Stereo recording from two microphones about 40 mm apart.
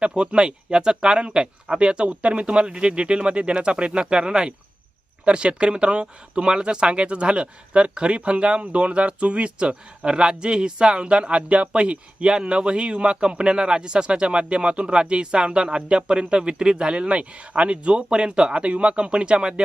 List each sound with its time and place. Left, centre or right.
0.0 s speech: right